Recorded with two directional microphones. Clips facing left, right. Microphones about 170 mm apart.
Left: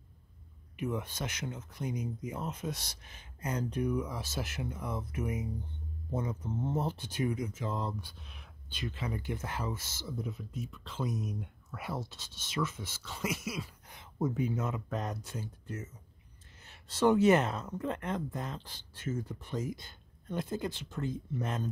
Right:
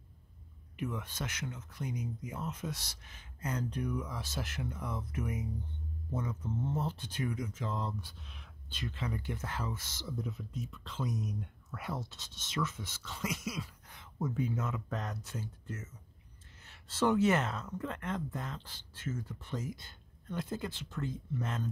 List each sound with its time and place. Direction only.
0.8 s speech: 15° left (ahead or behind)
16.6 s speech: 15° left (ahead or behind)